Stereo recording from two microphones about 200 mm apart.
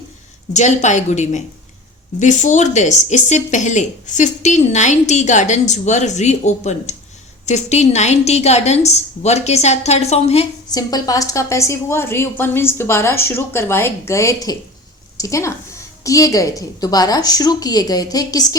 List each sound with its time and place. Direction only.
0.5 s speech: 35° left (ahead or behind)
10.7 s a woman's voice: 20° left (ahead or behind)